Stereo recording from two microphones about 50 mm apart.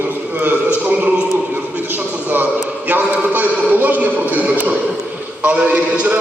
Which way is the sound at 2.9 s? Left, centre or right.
Right.